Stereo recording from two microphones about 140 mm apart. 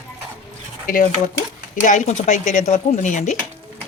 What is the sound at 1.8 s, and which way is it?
Speech, 65° left (ahead or behind).